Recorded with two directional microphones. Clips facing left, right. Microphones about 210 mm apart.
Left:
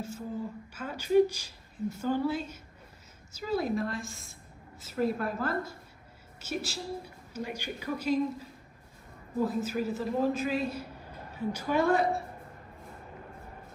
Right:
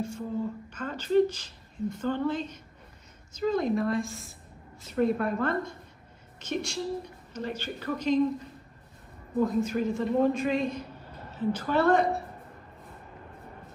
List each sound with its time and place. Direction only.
0.7 s a woman's voice: 10° left (ahead or behind)